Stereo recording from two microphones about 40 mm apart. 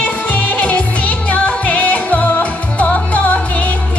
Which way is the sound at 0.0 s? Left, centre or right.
Left.